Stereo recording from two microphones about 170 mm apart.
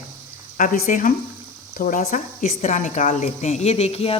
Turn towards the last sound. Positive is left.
turn(degrees=35)  # may be behind; listen again after turning